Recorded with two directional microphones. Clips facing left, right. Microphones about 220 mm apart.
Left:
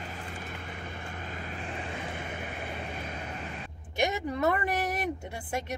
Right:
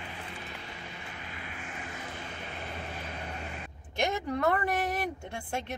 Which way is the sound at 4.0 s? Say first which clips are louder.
Left 1 dB; 10° left (ahead or behind).